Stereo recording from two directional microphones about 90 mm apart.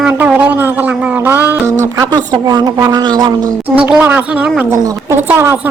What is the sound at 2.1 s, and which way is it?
Speech, 50° right (ahead or behind).